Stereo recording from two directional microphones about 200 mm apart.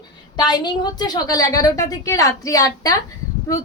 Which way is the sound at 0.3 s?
20° left (ahead or behind).